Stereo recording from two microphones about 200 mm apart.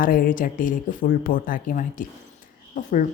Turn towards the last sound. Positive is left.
turn(degrees=40)  # may be behind; listen again after turning